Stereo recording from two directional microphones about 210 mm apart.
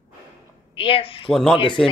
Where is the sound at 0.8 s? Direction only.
25° left (ahead or behind).